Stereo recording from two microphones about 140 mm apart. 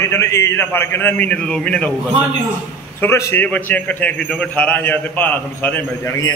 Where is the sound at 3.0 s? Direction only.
20° left (ahead or behind).